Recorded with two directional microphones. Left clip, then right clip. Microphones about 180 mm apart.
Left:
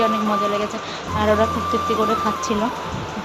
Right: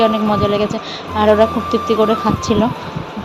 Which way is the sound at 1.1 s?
20° right (ahead or behind).